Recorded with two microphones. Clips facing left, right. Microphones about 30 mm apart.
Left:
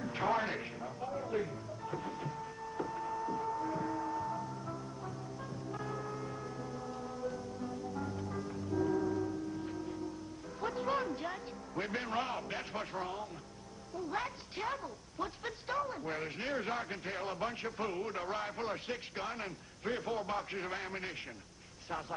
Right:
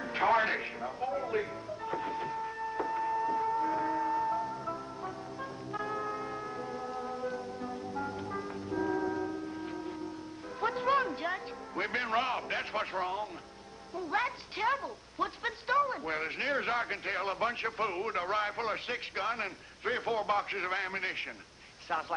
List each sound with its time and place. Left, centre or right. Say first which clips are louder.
0.0 s music: right 6 dB; right
13.9 s a woman's voice: right 6 dB; right